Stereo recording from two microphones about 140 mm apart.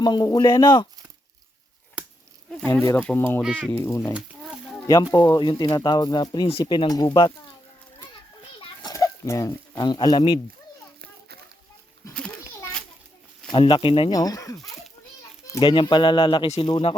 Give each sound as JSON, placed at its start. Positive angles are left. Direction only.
{"t": 0.0, "sound": "speech", "side_deg": 30}
{"t": 2.8, "sound": "speech", "side_deg": 15}
{"t": 3.4, "sound": "speech", "side_deg": -10}
{"t": 3.7, "sound": "speech", "side_deg": 15}
{"t": 4.1, "sound": "a sound", "side_deg": -5}
{"t": 4.9, "sound": "speech", "side_deg": 25}
{"t": 8.8, "sound": "speech", "side_deg": 25}
{"t": 12.1, "sound": "children playing", "side_deg": 5}
{"t": 13.5, "sound": "speech", "side_deg": 35}
{"t": 14.1, "sound": "speech", "side_deg": 25}
{"t": 15.6, "sound": "speech", "side_deg": 35}